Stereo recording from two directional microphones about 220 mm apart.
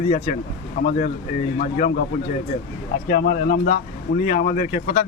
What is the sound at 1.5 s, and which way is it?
Speech, 35° left (ahead or behind).